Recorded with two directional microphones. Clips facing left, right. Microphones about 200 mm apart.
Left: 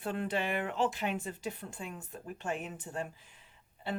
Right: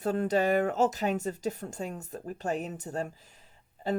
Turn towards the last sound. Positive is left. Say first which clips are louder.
# right 7 dB
turn(degrees=-40)  # may be behind; listen again after turning